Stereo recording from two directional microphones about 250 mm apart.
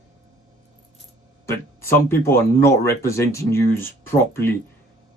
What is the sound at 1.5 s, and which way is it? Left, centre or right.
Speech, centre.